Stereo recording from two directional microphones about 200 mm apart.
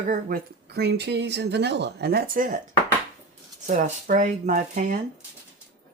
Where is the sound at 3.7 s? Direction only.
40° right (ahead or behind).